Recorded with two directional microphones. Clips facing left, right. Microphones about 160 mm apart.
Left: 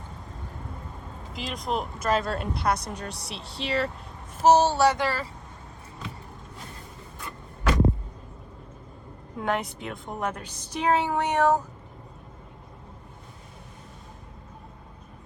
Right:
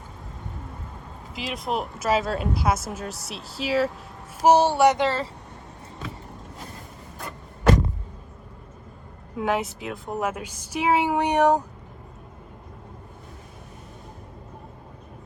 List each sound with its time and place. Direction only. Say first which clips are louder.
1.3 s a woman's voice: right 2 dB; centre (ahead or behind); by 5.3 s 25° right (ahead or behind)
9.3 s a woman's voice: right 3 dB; 5° right (ahead or behind)